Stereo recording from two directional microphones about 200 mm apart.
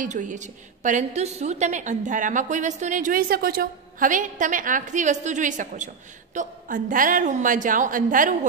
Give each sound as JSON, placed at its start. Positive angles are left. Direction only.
{"t": 0.0, "sound": "a woman's voice", "side_deg": -40}